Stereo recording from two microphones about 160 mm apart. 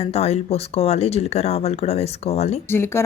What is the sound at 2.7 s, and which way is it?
Speech, 15° left (ahead or behind).